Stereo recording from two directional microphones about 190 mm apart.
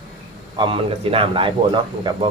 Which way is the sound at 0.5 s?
25° right (ahead or behind).